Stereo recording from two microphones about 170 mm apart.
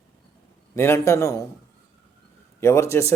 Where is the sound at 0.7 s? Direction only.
15° left (ahead or behind).